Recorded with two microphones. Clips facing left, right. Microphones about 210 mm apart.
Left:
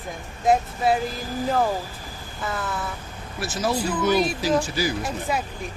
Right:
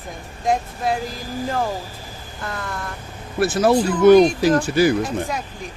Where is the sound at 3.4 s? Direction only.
60° right (ahead or behind).